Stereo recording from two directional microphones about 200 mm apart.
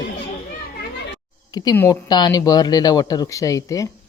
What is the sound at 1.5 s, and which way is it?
Speech, 15° left (ahead or behind).